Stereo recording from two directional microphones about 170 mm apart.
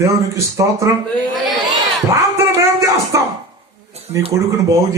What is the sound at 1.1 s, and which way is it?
Speech, 10° left (ahead or behind).